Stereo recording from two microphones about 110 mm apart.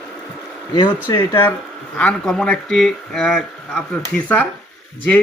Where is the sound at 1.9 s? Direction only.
10° left (ahead or behind).